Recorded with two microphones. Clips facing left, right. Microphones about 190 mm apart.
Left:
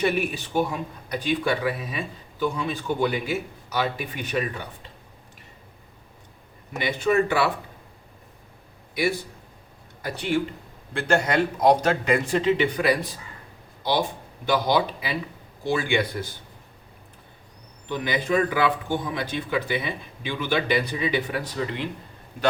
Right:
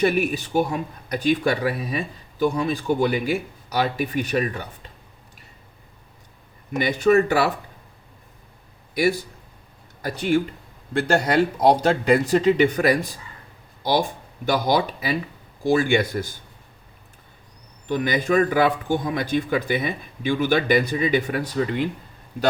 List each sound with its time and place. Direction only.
0.0 s a man's voice: 45° right (ahead or behind)
6.7 s a man's voice: 45° right (ahead or behind)
10.0 s a man's voice: 45° right (ahead or behind)
14.4 s a man's voice: 45° right (ahead or behind)
17.8 s a man's voice: 45° right (ahead or behind)